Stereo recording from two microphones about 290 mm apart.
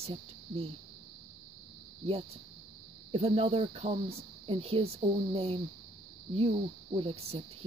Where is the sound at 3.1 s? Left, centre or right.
Centre.